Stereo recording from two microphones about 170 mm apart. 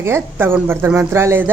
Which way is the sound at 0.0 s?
15° right (ahead or behind).